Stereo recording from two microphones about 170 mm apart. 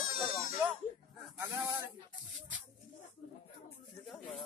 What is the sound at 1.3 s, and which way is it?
Snake, 20° right (ahead or behind).